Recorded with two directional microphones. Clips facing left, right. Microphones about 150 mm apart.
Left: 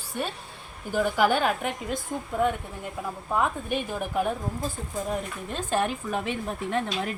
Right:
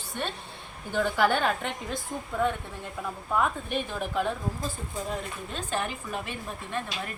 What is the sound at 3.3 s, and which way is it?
Speech, 10° left (ahead or behind).